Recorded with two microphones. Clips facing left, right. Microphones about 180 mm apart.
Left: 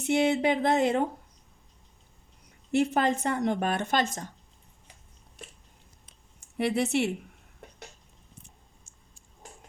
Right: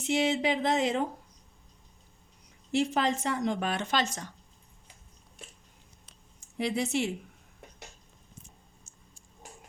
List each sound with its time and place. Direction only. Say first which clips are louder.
0.0 s a woman's voice: left 3 dB; 55° left (ahead or behind)
2.7 s a woman's voice: left 3 dB; 55° left (ahead or behind)
6.6 s a woman's voice: left 3 dB; 65° left (ahead or behind)